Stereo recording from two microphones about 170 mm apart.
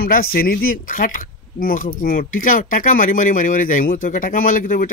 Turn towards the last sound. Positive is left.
turn(degrees=55)  # may be behind; listen again after turning